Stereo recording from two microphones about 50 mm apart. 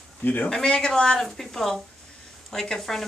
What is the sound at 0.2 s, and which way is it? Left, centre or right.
Speech, left.